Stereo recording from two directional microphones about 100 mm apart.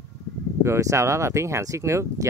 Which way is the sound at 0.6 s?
30° right (ahead or behind).